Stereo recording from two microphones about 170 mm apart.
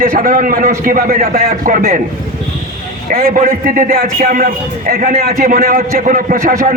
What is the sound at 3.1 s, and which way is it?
A man's voice, 55° right (ahead or behind).